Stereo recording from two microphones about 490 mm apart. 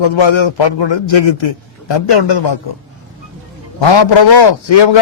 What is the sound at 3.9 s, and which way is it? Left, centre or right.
A man's voice, left.